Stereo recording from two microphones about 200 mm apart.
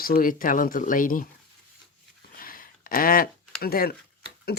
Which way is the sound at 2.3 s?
45° left (ahead or behind).